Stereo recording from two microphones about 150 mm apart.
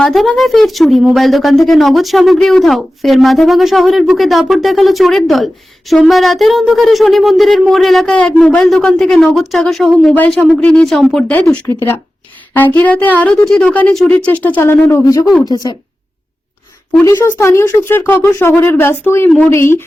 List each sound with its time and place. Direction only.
0.0 s a woman's voice: centre (ahead or behind); by 15.8 s 30° left (ahead or behind)
17.0 s a woman's voice: 20° left (ahead or behind)